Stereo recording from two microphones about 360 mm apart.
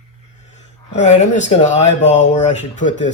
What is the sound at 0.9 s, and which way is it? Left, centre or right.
Speech, centre.